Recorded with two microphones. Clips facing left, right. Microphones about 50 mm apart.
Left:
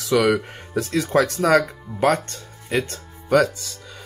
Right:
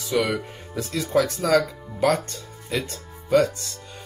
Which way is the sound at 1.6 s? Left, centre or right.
Left.